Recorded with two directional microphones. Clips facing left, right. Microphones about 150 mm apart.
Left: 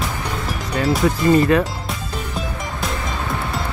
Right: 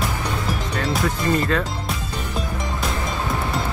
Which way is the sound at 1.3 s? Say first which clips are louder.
Left 7 dB; 20° left (ahead or behind).